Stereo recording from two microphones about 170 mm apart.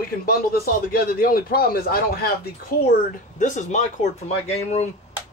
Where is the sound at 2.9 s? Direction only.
45° left (ahead or behind).